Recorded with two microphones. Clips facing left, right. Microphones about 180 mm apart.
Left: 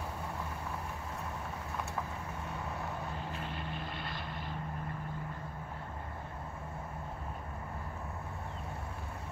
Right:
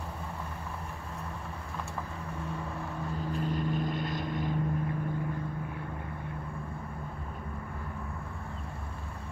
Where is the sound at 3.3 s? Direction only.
40° right (ahead or behind).